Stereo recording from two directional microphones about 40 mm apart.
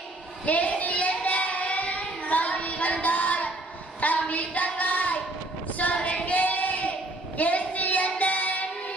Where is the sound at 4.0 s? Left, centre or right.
Left.